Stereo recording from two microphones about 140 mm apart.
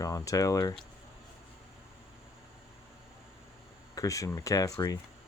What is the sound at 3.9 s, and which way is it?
Speech, 25° left (ahead or behind).